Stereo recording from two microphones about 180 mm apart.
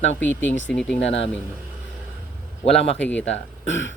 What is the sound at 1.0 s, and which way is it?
Speech, 90° left.